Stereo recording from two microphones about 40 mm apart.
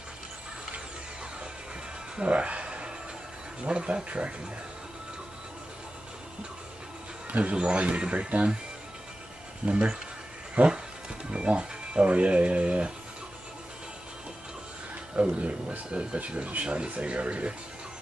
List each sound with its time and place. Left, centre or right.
2.1 s music: right
3.6 s speech: right
7.2 s speech: right
9.7 s speech: right
10.6 s speech: right
11.2 s speech: right
15.1 s speech: right